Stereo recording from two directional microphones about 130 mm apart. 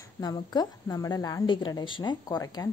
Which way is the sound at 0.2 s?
30° left (ahead or behind).